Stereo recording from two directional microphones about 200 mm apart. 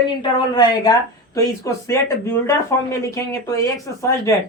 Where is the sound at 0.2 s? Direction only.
20° left (ahead or behind).